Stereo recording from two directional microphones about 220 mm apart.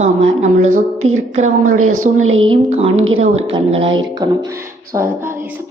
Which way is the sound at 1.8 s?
75° right (ahead or behind).